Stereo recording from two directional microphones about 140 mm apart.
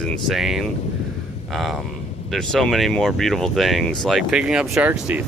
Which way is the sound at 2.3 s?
Centre (ahead or behind).